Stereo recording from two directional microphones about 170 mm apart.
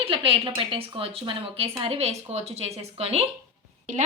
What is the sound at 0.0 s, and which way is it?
A woman's voice, 30° right (ahead or behind).